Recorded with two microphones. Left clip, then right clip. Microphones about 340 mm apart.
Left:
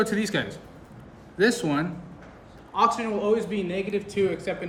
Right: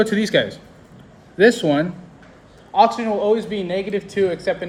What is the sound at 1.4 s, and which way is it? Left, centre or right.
Speech, right.